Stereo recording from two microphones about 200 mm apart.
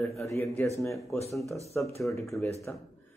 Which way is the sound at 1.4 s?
15° right (ahead or behind).